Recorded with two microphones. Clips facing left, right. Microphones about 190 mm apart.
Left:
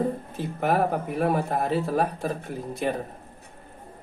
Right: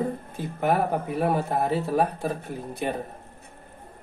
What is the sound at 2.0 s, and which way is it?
Speech, 60° right (ahead or behind).